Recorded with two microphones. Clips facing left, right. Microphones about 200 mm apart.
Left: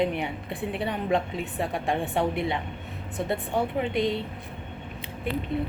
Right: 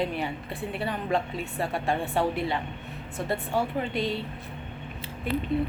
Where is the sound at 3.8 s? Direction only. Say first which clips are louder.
Left 3 dB; 20° left (ahead or behind).